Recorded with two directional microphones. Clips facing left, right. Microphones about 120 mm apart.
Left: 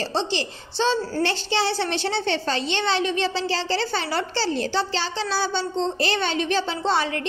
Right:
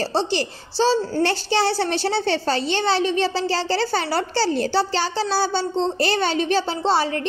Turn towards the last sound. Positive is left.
turn(degrees=-35)  # may be behind; listen again after turning